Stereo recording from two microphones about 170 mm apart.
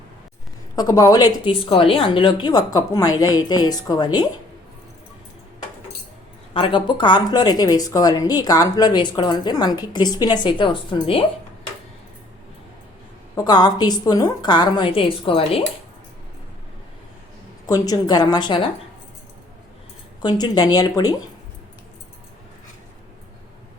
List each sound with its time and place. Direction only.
0.8 s speech: 20° left (ahead or behind)
1.5 s speech: 35° left (ahead or behind)
6.5 s speech: 30° left (ahead or behind)
13.3 s speech: 25° left (ahead or behind)
17.7 s speech: 20° left (ahead or behind)
20.2 s speech: 25° left (ahead or behind)